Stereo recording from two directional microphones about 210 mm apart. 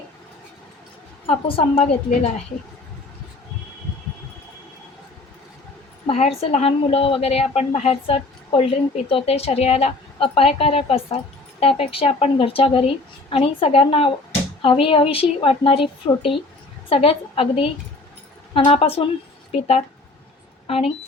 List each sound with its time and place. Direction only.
1.3 s a woman's voice: 25° left (ahead or behind)
6.1 s a woman's voice: 30° left (ahead or behind)